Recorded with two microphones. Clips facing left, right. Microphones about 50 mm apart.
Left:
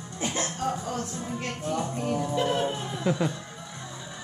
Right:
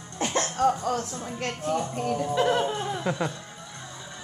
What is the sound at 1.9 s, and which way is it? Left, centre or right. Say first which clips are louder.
Music: right 1 dB; right.